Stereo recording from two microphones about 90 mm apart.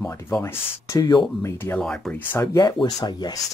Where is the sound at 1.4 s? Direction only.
30° left (ahead or behind).